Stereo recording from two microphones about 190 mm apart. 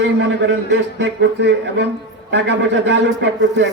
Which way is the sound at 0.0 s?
70° right (ahead or behind).